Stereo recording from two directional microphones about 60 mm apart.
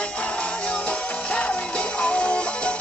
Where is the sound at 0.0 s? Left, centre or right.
Left.